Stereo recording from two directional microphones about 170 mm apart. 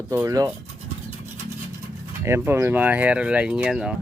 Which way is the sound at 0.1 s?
15° right (ahead or behind).